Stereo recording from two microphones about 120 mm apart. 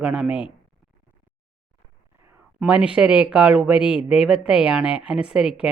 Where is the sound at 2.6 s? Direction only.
10° right (ahead or behind).